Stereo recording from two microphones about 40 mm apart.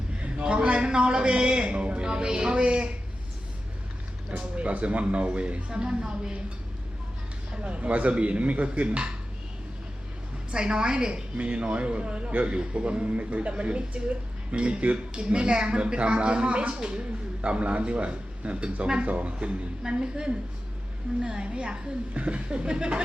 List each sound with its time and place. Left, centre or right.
0.2 s a man's voice: right
4.3 s a woman's voice: right
7.6 s speech: right
10.5 s a woman's voice: right
19.8 s a woman's voice: centre